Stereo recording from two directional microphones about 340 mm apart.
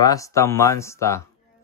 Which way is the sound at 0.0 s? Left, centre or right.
Centre.